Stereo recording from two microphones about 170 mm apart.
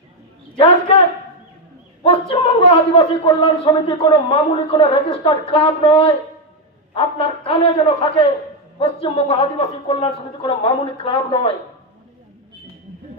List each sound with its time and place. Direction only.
0.6 s a man's voice: 30° left (ahead or behind)
2.0 s a man's voice: 35° left (ahead or behind)